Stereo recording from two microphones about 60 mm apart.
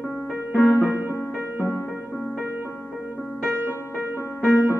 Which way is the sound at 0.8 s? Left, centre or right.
Right.